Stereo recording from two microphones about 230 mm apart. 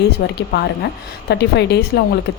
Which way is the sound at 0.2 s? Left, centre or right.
Left.